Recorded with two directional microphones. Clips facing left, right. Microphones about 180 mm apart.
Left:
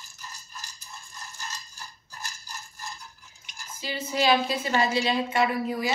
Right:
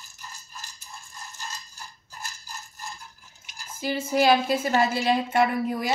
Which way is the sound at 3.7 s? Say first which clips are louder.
Right 5 dB; 50° right (ahead or behind).